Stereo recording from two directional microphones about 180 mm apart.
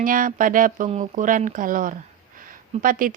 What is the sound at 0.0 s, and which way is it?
A woman's voice, 50° right (ahead or behind).